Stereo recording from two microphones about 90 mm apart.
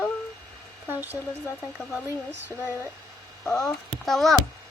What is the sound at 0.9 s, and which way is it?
Speech, 20° right (ahead or behind).